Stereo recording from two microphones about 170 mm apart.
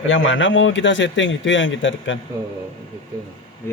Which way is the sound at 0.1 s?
90° left.